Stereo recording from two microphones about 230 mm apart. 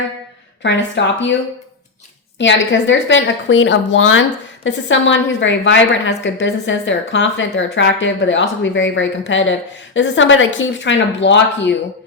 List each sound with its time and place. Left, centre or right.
0.6 s a woman's voice: left
2.4 s a woman's voice: left